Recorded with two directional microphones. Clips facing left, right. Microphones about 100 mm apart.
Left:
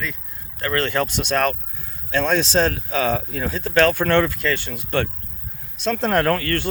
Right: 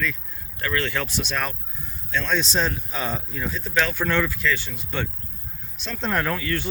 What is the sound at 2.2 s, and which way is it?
Speech, 85° left.